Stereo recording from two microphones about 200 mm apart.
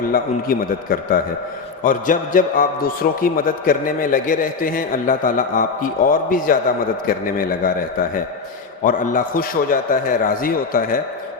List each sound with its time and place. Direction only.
0.1 s a man's voice: 45° left (ahead or behind)
8.8 s a man's voice: 40° left (ahead or behind)